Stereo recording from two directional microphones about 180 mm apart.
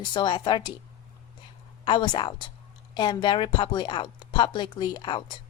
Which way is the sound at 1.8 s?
25° left (ahead or behind).